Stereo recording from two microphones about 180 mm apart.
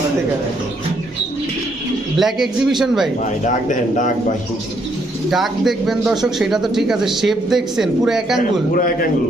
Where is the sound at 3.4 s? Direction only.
45° left (ahead or behind).